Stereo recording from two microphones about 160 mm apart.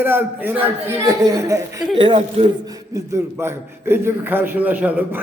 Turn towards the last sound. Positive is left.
turn(degrees=-10)  # may be behind; listen again after turning